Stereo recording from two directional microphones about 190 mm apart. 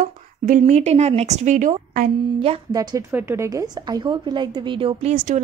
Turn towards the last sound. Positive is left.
turn(degrees=-40)  # may be behind; listen again after turning